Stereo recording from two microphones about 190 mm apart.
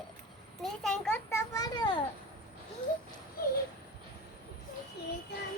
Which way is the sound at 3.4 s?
50° left (ahead or behind).